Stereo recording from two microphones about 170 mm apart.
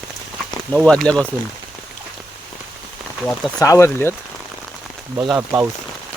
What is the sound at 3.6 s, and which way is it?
Speech, 15° left (ahead or behind).